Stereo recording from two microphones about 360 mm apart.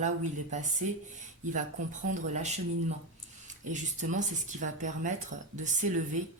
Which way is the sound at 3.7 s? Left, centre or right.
Right.